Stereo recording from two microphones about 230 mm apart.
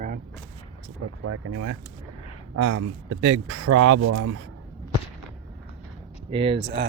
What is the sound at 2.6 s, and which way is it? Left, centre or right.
Speech, right.